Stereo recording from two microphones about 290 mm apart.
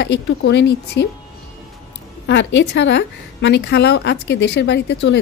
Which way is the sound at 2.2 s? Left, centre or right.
Left.